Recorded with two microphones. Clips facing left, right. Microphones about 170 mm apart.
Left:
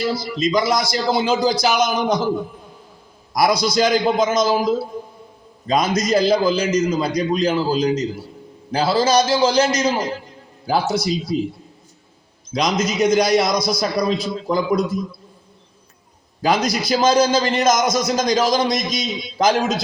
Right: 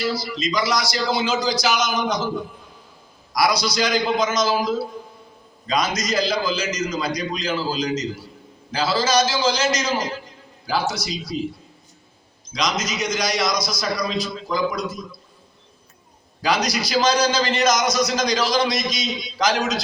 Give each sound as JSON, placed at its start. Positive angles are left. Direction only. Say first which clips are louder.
{"t": 0.1, "sound": "a man's voice", "louder": "left 5 dB", "side_deg": 50}
{"t": 3.3, "sound": "a man's voice", "louder": "left 4 dB", "side_deg": 50}
{"t": 8.7, "sound": "a man's voice", "louder": "left 4 dB", "side_deg": 55}
{"t": 12.5, "sound": "a man's voice", "louder": "left 6 dB", "side_deg": 55}
{"t": 16.4, "sound": "a man's voice", "louder": "left 3 dB", "side_deg": 50}